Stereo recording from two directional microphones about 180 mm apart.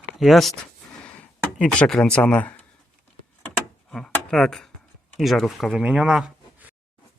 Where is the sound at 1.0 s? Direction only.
5° left (ahead or behind).